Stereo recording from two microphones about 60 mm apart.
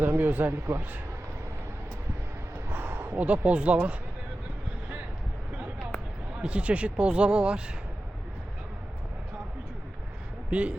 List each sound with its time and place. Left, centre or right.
0.0 s a man's voice: right
2.6 s a sound: right
6.4 s speech: right
10.5 s speech: right